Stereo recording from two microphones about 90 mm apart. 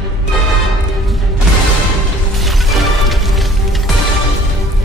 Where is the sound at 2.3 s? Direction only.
Centre (ahead or behind).